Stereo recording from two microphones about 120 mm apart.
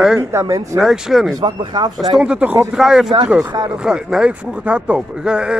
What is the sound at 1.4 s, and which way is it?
Speech, 35° right (ahead or behind).